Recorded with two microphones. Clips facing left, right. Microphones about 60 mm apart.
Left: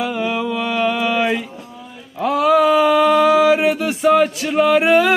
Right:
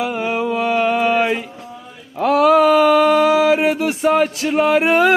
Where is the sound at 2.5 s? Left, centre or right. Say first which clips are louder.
Even; right.